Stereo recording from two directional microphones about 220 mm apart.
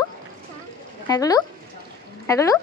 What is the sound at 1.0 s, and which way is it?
A woman's voice, 15° left (ahead or behind).